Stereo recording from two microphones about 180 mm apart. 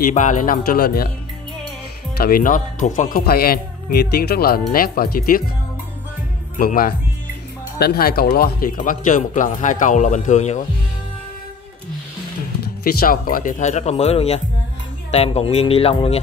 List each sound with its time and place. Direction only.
0.0 s speech: 45° left (ahead or behind)
2.1 s speech: 55° left (ahead or behind)
6.6 s speech: 55° left (ahead or behind)
12.6 s speech: 55° left (ahead or behind); by 16.2 s 30° left (ahead or behind)